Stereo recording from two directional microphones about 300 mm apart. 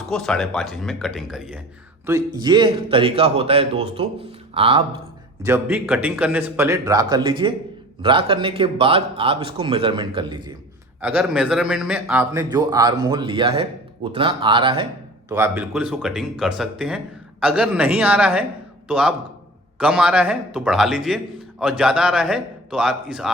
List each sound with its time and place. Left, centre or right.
0.1 s a man's voice: centre
5.4 s a man's voice: centre
11.0 s a man's voice: centre